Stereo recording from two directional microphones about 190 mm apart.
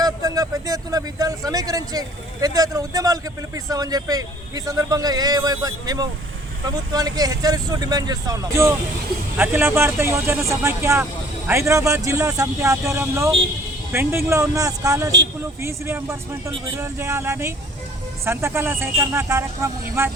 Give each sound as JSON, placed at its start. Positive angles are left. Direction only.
{"t": 0.0, "sound": "a man's voice", "side_deg": -20}